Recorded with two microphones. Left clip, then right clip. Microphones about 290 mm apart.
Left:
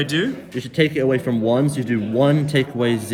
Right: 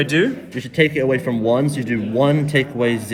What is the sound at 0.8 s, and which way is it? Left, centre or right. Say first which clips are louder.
Speech: right 2 dB; centre.